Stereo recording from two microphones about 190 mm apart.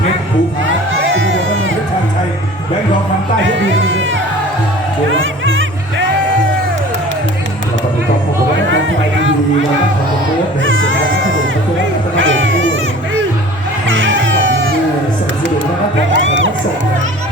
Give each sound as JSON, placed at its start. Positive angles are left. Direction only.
{"t": 3.6, "sound": "speech", "side_deg": -85}
{"t": 5.1, "sound": "music", "side_deg": -90}
{"t": 10.6, "sound": "music", "side_deg": -90}
{"t": 12.1, "sound": "a sound", "side_deg": -85}
{"t": 13.8, "sound": "music", "side_deg": -85}
{"t": 16.1, "sound": "music", "side_deg": -80}